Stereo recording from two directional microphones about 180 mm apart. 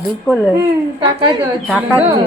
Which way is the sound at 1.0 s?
25° right (ahead or behind).